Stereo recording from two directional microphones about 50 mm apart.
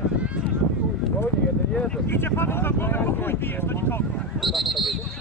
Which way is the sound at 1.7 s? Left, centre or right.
Centre.